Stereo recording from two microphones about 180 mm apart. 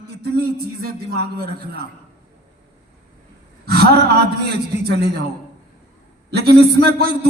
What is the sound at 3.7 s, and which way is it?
A man's voice, 65° right (ahead or behind).